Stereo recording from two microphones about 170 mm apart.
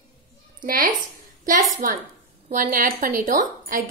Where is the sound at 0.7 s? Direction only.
55° right (ahead or behind).